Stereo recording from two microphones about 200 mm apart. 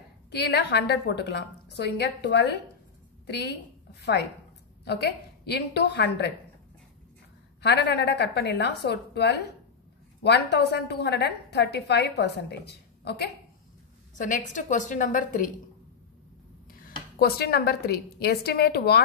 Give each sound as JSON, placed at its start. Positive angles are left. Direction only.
{"t": 0.3, "sound": "a woman's voice", "side_deg": 55}
{"t": 7.6, "sound": "a woman's voice", "side_deg": 55}
{"t": 14.1, "sound": "a woman's voice", "side_deg": 40}
{"t": 17.2, "sound": "a woman's voice", "side_deg": 55}